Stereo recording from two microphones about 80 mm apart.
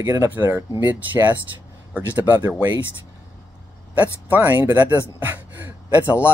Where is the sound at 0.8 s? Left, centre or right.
Right.